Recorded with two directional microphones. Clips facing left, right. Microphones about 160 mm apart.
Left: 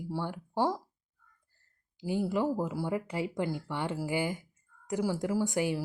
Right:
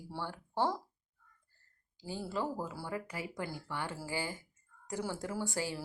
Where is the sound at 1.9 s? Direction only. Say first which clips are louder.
Left 8 dB; 15° left (ahead or behind).